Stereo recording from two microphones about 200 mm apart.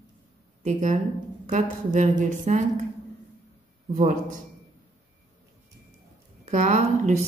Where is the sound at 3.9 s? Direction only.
40° right (ahead or behind).